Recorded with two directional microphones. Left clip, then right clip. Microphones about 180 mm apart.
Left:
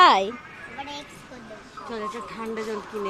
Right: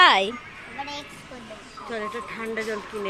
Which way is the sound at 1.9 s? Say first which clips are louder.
Right 1 dB; 65° left (ahead or behind).